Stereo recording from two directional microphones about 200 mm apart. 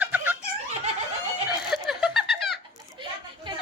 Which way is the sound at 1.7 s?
5° right (ahead or behind).